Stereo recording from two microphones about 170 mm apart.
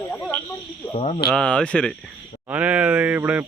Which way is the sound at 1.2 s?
5° left (ahead or behind).